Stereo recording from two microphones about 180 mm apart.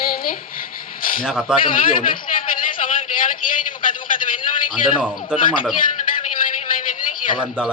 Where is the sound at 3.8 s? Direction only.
50° left (ahead or behind).